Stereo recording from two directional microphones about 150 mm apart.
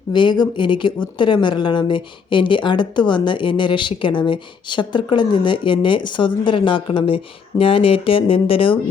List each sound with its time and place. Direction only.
0.1 s a woman's voice: 30° left (ahead or behind)